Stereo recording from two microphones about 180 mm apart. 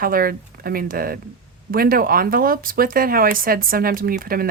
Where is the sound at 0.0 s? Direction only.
55° right (ahead or behind).